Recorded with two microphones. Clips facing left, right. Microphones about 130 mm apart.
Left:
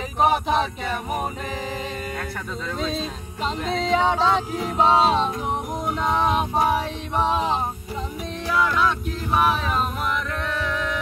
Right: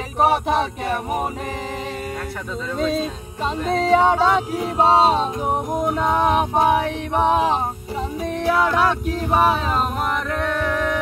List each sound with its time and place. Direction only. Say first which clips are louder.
3.7 s music: right 5 dB; 50° right (ahead or behind)
4.7 s music: right 2 dB; 30° right (ahead or behind)
5.5 s music: right 5 dB; 45° right (ahead or behind)
9.4 s music: right 2 dB; 40° right (ahead or behind)